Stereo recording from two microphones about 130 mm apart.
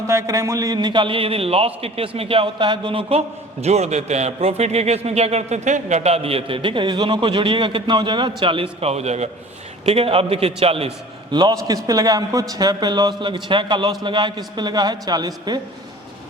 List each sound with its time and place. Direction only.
0.1 s a man's voice: 25° right (ahead or behind); by 10.9 s 50° right (ahead or behind)
11.3 s a man's voice: 35° right (ahead or behind)